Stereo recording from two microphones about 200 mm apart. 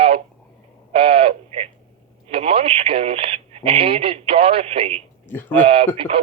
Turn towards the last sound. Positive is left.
turn(degrees=-30)  # may be behind; listen again after turning